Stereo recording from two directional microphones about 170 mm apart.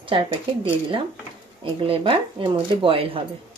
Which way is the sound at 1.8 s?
35° right (ahead or behind).